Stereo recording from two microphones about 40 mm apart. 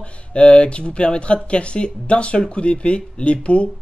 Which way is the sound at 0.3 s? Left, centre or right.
Left.